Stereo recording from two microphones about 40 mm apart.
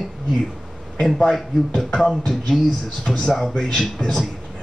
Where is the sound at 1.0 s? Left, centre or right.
Centre.